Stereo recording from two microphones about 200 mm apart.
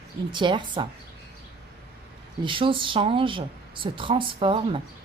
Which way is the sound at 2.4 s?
25° right (ahead or behind).